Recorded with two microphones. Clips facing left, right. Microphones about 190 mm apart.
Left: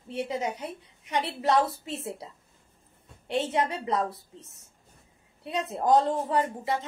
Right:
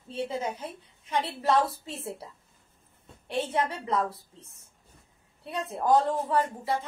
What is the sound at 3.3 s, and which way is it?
Speech, 20° left (ahead or behind).